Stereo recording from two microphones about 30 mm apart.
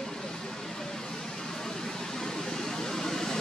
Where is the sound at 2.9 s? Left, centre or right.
Centre.